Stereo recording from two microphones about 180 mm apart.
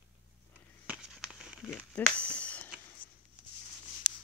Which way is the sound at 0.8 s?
5° right (ahead or behind).